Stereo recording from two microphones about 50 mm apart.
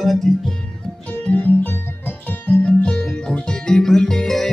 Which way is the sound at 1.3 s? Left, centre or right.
Left.